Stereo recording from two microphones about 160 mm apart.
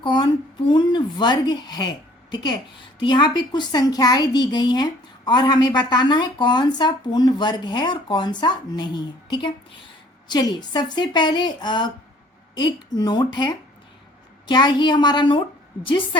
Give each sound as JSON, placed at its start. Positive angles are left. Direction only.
{"t": 0.0, "sound": "a woman's voice", "side_deg": 30}